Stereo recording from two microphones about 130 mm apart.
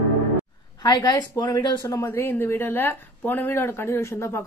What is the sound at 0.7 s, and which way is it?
Speech, 30° left (ahead or behind).